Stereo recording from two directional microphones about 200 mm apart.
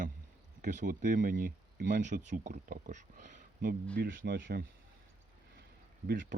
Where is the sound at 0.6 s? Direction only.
40° right (ahead or behind).